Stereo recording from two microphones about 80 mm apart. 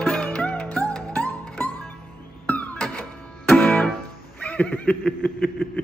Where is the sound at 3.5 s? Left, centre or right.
Centre.